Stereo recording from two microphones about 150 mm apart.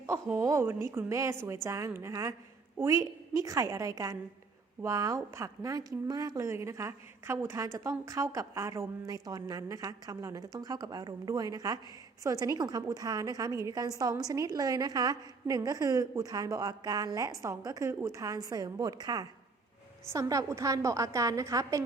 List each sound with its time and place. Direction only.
0.0 s a woman's voice: 15° right (ahead or behind)